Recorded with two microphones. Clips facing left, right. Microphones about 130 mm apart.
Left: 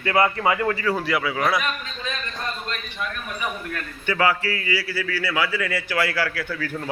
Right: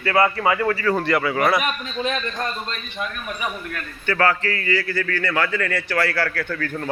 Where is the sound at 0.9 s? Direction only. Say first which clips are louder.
Right 3 dB; 5° left (ahead or behind).